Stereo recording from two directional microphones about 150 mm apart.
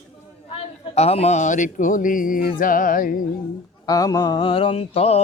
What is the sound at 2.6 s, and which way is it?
Music, 65° left (ahead or behind).